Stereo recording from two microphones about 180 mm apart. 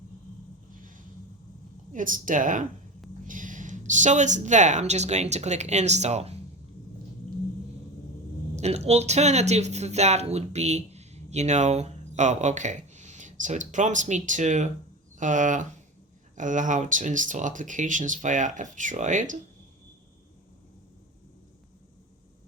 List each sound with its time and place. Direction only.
1.9 s speech: 45° right (ahead or behind)
8.5 s speech: 35° right (ahead or behind)